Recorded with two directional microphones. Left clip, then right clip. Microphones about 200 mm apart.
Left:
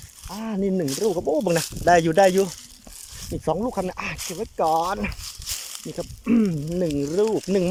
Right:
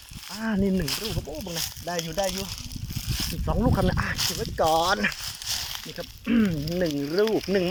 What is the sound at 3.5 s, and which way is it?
Speech, 15° left (ahead or behind).